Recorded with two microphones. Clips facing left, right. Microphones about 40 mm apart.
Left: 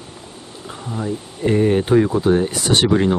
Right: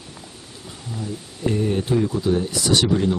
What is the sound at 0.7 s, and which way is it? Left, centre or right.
Speech, left.